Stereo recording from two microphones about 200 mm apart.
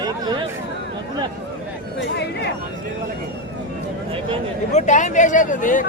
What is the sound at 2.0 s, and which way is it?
Chatter, 60° left (ahead or behind).